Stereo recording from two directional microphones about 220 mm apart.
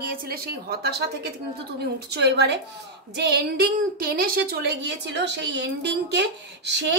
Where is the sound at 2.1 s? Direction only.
50° right (ahead or behind).